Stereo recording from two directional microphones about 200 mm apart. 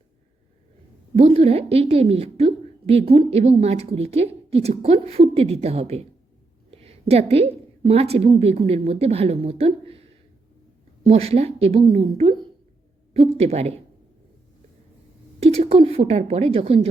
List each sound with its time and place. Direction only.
1.1 s a woman's voice: 30° right (ahead or behind)
11.0 s a woman's voice: 30° right (ahead or behind)
15.4 s a woman's voice: 30° right (ahead or behind)